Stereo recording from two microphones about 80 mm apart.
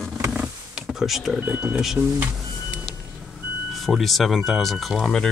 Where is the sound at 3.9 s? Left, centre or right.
Centre.